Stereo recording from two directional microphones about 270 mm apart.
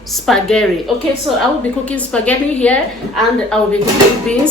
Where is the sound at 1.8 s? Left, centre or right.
Centre.